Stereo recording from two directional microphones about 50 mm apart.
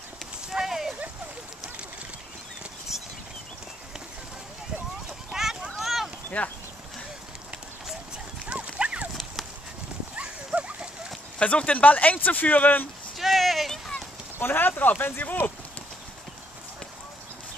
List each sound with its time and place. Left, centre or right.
0.5 s horse: centre
2.9 s a sound: centre
5.3 s a sound: centre
6.4 s speech: left
8.5 s clip-clop: right
10.1 s clip-clop: right
11.3 s speech: left
13.2 s a sound: centre
14.4 s speech: left